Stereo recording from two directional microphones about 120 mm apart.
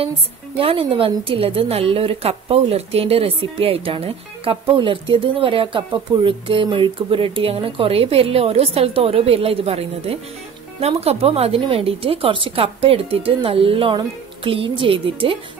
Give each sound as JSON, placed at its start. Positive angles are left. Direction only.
{"t": 0.6, "sound": "a woman's voice", "side_deg": -50}